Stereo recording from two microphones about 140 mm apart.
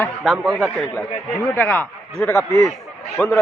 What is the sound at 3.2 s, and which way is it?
Speech, 10° left (ahead or behind).